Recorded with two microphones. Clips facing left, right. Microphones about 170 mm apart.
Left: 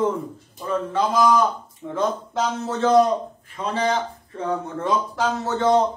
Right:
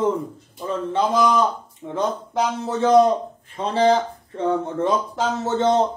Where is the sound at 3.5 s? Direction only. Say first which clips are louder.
Right 5 dB; 30° right (ahead or behind).